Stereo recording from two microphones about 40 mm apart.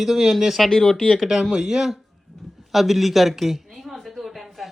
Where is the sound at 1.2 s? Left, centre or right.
Centre.